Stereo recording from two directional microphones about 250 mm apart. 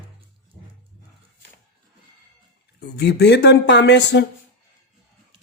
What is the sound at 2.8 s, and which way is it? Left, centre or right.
Speech, left.